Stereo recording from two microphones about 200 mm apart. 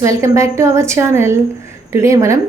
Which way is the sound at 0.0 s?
15° right (ahead or behind).